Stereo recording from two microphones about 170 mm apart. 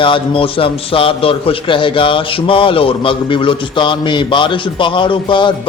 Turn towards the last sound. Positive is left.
turn(degrees=30)  # may be behind; listen again after turning